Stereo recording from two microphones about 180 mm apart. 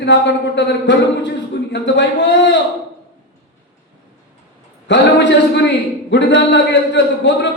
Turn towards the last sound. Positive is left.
turn(degrees=75)  # may be behind; listen again after turning